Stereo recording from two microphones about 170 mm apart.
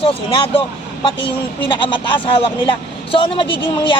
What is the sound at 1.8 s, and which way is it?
Speech, 30° left (ahead or behind).